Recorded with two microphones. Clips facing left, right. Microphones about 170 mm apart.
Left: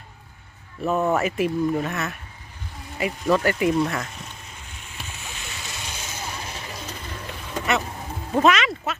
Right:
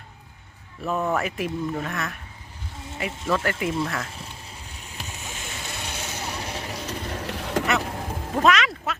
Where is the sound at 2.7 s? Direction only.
25° right (ahead or behind).